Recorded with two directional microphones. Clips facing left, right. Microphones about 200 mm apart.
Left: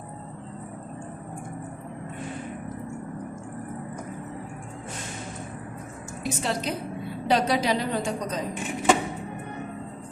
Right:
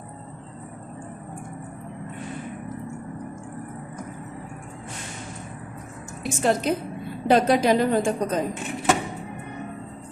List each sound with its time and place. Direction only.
6.2 s a woman's voice: 50° right (ahead or behind)